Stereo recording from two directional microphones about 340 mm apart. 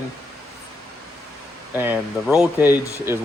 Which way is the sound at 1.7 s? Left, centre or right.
Centre.